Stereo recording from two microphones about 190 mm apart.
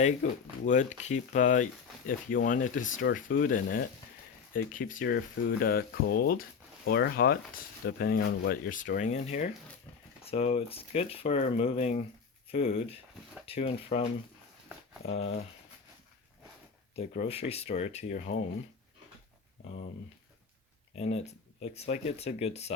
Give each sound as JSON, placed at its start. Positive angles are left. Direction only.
{"t": 0.0, "sound": "speech", "side_deg": 40}
{"t": 16.9, "sound": "speech", "side_deg": 30}
{"t": 20.9, "sound": "speech", "side_deg": 35}